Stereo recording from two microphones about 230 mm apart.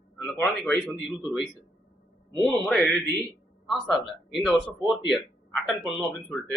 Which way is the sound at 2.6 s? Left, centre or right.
Centre.